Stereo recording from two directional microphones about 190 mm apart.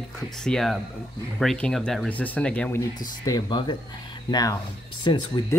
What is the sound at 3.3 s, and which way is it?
Speech, 25° left (ahead or behind).